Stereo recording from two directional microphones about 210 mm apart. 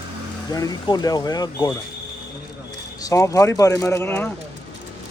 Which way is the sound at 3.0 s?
15° left (ahead or behind).